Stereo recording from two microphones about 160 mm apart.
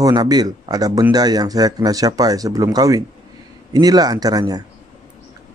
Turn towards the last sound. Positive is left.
turn(degrees=-25)  # may be behind; listen again after turning